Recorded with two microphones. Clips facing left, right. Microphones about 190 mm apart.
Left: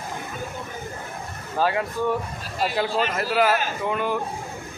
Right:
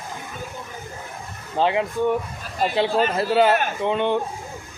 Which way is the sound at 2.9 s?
40° right (ahead or behind).